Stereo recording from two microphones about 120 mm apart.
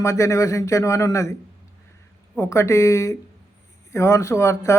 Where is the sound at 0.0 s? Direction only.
25° left (ahead or behind).